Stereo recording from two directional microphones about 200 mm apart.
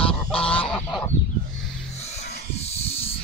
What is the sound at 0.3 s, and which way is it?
Goose, 5° left (ahead or behind).